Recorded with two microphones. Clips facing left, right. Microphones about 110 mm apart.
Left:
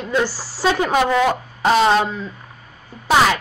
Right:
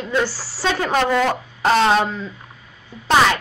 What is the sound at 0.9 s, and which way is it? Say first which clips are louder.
A woman's voice: right 1 dB; 5° left (ahead or behind).